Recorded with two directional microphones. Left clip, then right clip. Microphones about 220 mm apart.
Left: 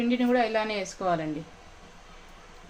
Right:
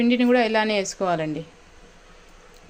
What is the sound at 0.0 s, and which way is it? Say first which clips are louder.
A woman's voice: right 5 dB; 45° right (ahead or behind).